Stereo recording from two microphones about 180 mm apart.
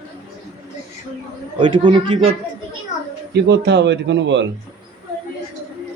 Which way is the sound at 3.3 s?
70° right (ahead or behind).